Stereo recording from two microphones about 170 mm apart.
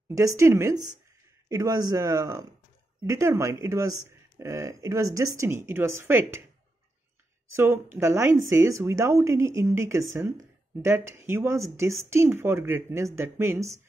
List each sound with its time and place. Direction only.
0.1 s speech: 20° right (ahead or behind)
7.4 s speech: 15° right (ahead or behind)